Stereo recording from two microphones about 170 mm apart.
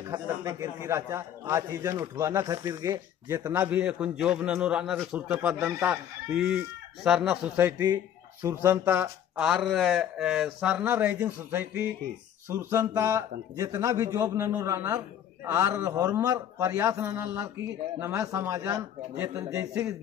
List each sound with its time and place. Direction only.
0.0 s a man's voice: 20° right (ahead or behind)
7.8 s a man's voice: 25° right (ahead or behind)